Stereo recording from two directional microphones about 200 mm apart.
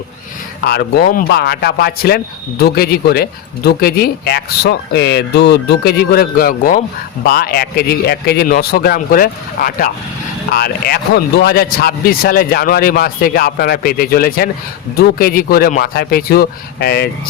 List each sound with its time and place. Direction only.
0.6 s speech: 50° left (ahead or behind)